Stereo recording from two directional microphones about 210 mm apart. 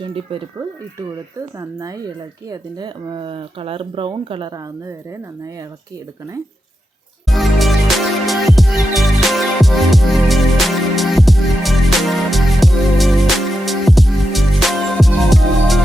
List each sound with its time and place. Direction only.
0.0 s speech: 25° right (ahead or behind)
7.3 s music: centre (ahead or behind)